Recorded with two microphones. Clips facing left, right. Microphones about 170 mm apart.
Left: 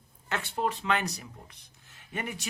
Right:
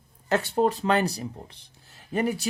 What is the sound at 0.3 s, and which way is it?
Speech, 40° right (ahead or behind).